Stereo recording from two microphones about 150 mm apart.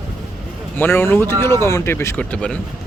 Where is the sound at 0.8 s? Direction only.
15° left (ahead or behind).